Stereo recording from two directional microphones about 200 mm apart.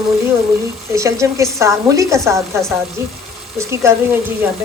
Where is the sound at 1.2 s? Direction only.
15° right (ahead or behind).